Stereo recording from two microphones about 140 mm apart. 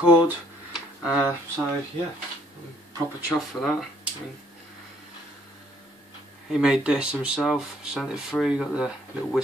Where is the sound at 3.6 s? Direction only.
5° left (ahead or behind).